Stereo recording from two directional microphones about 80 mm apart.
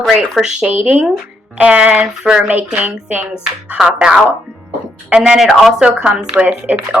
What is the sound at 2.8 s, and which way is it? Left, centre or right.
Speech, right.